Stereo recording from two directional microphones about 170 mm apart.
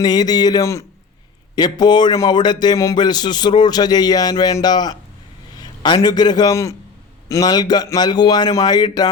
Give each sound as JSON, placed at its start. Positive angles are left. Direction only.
{"t": 0.0, "sound": "a man's voice", "side_deg": 25}